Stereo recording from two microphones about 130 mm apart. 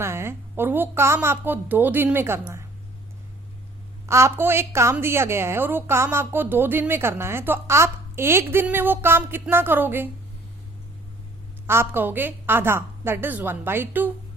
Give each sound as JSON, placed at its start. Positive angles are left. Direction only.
{"t": 0.0, "sound": "a woman's voice", "side_deg": -20}
{"t": 4.0, "sound": "a woman's voice", "side_deg": -20}
{"t": 11.6, "sound": "a woman's voice", "side_deg": -20}